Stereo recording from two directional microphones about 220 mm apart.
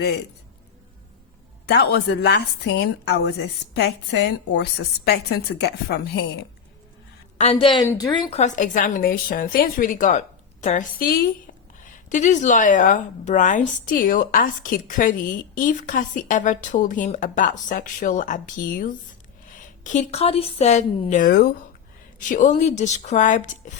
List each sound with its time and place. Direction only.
1.6 s a woman's voice: 50° left (ahead or behind)
7.3 s a woman's voice: 25° left (ahead or behind)